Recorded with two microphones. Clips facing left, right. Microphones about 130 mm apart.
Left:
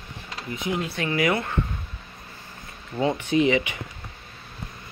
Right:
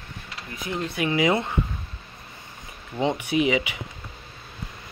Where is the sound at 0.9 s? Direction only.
15° right (ahead or behind).